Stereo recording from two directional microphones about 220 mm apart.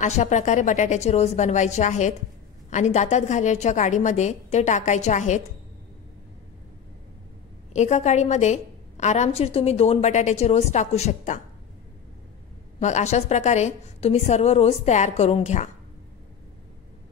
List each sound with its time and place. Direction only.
0.0 s a woman's voice: 30° left (ahead or behind)
7.7 s a woman's voice: 30° left (ahead or behind)
12.8 s a woman's voice: 30° left (ahead or behind)